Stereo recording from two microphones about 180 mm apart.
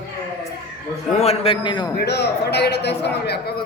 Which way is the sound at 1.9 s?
65° left (ahead or behind).